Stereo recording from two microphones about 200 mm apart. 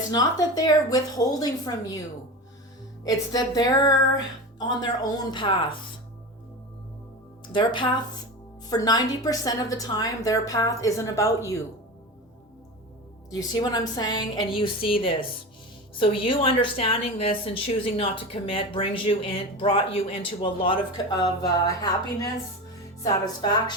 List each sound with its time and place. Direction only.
0.1 s a woman's voice: 20° left (ahead or behind)
3.0 s a woman's voice: 20° left (ahead or behind)
5.3 s a woman's voice: 25° left (ahead or behind)
7.5 s a woman's voice: 25° left (ahead or behind)
13.3 s a woman's voice: 20° left (ahead or behind)